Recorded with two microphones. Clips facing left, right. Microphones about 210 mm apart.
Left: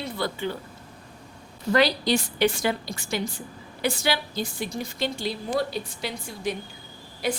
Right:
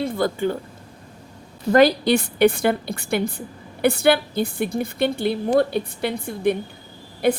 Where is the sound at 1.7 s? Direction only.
55° right (ahead or behind).